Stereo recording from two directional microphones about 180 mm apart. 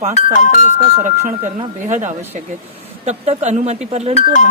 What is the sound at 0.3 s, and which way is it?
Speech, 45° left (ahead or behind).